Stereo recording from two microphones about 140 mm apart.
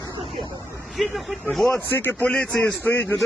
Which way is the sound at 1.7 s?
15° left (ahead or behind).